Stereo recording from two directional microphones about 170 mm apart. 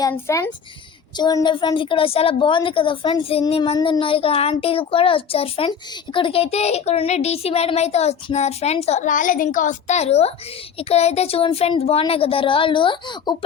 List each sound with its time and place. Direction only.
0.0 s a child's voice: 20° left (ahead or behind)